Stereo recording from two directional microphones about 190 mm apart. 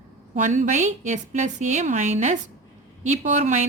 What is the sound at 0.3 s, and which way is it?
A woman's voice, 40° right (ahead or behind).